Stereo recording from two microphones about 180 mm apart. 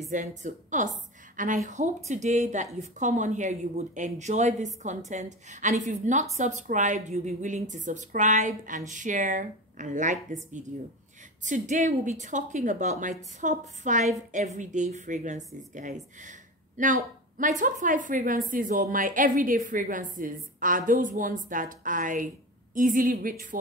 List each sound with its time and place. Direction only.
0.1 s a woman's voice: 45° right (ahead or behind)